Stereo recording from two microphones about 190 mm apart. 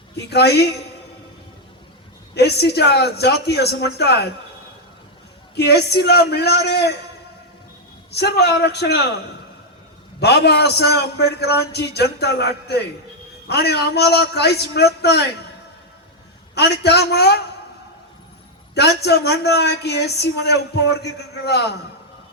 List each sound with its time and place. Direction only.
0.3 s speech: 60° left (ahead or behind)
2.3 s speech: 60° left (ahead or behind)
5.5 s speech: 60° left (ahead or behind)
8.1 s speech: 60° left (ahead or behind)
10.2 s speech: 60° left (ahead or behind)
16.6 s speech: 60° left (ahead or behind)
18.7 s speech: 60° left (ahead or behind)